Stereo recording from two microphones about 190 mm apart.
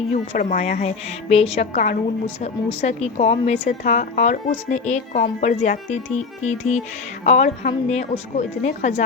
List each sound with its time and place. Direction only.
0.1 s speech: 40° left (ahead or behind)